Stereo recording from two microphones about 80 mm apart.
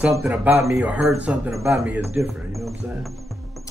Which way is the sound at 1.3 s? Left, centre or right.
Centre.